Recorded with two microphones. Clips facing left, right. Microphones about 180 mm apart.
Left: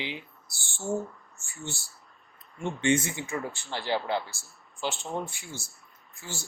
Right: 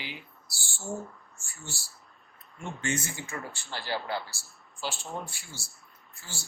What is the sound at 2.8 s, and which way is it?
Speech, 25° left (ahead or behind).